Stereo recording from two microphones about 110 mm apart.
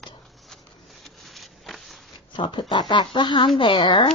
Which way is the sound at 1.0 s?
Centre (ahead or behind).